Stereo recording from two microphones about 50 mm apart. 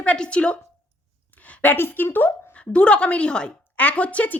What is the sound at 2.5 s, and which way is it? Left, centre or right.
A woman's voice, left.